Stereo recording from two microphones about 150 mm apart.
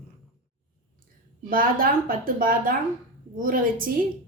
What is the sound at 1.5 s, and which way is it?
A woman's voice, 70° right (ahead or behind).